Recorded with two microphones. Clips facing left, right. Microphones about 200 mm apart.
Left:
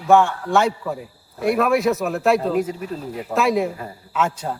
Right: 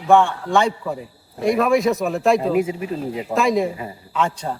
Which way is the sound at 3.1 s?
20° right (ahead or behind).